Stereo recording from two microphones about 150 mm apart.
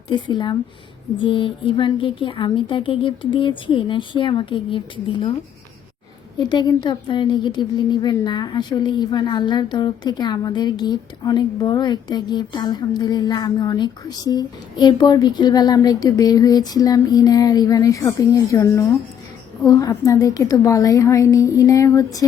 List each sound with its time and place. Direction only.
0.1 s a woman's voice: 30° left (ahead or behind)
6.4 s a woman's voice: 30° left (ahead or behind)